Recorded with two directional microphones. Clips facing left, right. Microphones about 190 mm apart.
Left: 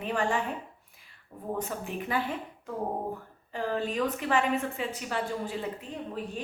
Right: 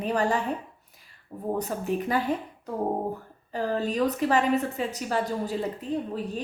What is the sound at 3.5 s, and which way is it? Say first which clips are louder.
A woman's voice: right 3 dB; 40° right (ahead or behind).